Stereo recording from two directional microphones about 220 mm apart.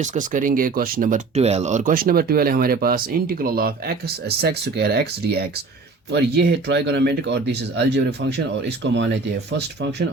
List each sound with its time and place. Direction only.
0.0 s speech: 35° right (ahead or behind)